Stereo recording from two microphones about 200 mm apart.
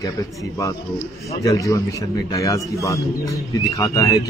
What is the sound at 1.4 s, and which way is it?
Speech, 15° left (ahead or behind).